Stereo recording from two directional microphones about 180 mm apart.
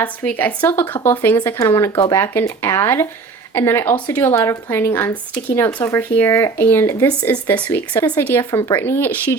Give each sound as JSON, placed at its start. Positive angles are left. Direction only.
{"t": 0.0, "sound": "speech", "side_deg": 10}
{"t": 8.4, "sound": "speech", "side_deg": 20}
{"t": 8.7, "sound": "speech", "side_deg": 10}